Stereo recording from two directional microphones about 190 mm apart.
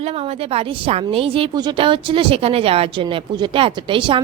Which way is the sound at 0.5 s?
30° right (ahead or behind).